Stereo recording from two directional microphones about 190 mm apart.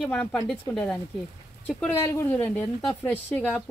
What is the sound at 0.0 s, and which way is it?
Speech, 5° left (ahead or behind).